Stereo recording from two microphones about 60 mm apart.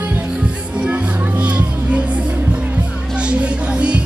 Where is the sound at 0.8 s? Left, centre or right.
Right.